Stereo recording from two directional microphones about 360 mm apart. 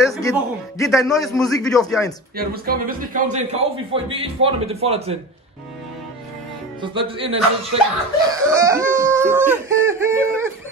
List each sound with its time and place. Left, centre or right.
0.0 s a man's voice: centre
2.3 s a man's voice: right
6.8 s a man's voice: centre